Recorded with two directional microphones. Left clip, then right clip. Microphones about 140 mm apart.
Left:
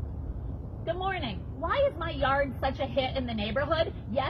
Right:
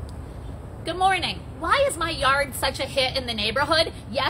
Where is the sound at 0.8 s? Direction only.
25° right (ahead or behind).